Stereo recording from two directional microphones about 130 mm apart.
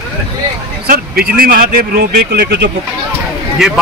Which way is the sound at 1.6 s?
90° right.